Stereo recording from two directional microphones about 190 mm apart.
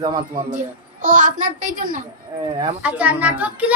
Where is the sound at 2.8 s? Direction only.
5° right (ahead or behind).